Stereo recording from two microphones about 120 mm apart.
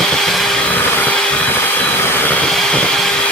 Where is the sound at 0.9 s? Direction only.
15° left (ahead or behind).